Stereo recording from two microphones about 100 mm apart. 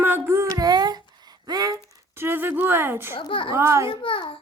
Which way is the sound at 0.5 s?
40° right (ahead or behind).